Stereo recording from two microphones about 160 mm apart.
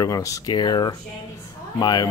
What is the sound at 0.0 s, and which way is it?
Speech, 20° left (ahead or behind).